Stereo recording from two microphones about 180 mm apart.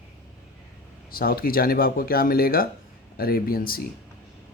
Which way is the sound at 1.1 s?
55° left (ahead or behind).